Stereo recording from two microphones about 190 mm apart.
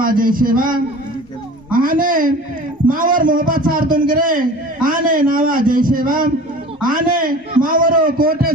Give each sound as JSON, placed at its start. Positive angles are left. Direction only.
{"t": 0.0, "sound": "a man's voice", "side_deg": -45}